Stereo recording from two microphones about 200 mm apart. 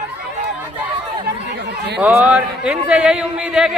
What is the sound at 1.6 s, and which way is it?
Chatter, 55° right (ahead or behind).